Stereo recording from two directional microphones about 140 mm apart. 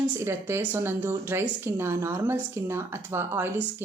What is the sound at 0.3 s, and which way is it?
Speech, 15° right (ahead or behind).